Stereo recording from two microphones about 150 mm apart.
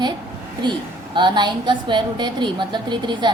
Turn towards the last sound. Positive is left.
turn(degrees=-30)  # may be behind; listen again after turning